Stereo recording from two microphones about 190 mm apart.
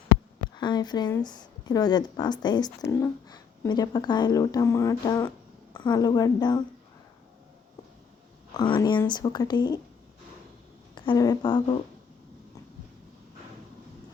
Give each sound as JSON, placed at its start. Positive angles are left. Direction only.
{"t": 0.5, "sound": "speech", "side_deg": 25}
{"t": 8.5, "sound": "speech", "side_deg": 20}
{"t": 10.9, "sound": "speech", "side_deg": 25}